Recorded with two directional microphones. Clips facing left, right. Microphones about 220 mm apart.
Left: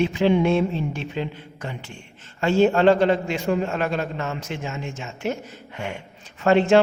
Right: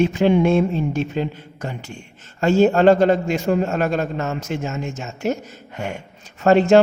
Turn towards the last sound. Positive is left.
turn(degrees=-40)  # may be behind; listen again after turning